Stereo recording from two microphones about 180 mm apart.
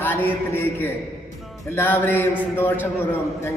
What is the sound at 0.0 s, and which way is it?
A man's voice, 10° left (ahead or behind).